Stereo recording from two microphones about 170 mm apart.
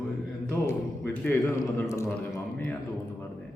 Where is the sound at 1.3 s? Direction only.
10° left (ahead or behind).